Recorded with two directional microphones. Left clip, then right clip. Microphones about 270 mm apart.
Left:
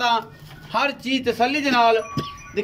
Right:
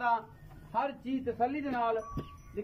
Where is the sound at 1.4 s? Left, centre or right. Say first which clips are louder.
Left 14 dB; left.